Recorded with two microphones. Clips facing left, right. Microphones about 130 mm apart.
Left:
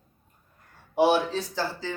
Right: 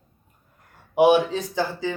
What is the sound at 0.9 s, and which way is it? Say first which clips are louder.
Speech: right 5 dB; 15° right (ahead or behind).